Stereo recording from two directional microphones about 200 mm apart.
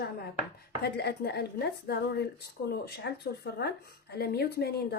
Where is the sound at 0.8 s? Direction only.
55° left (ahead or behind).